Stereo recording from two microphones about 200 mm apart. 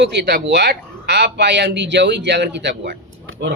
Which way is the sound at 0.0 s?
55° right (ahead or behind).